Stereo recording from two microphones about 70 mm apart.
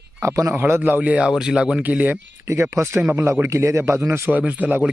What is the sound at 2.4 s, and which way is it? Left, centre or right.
A man's voice, right.